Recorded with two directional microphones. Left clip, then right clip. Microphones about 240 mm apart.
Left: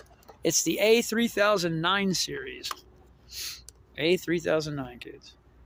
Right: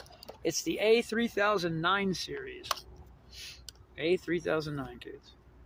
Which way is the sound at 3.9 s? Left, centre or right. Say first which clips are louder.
Left 4 dB; left.